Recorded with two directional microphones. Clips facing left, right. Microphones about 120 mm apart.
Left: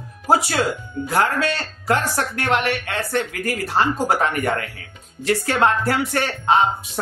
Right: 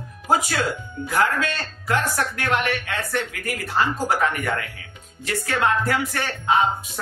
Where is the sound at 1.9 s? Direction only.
35° left (ahead or behind).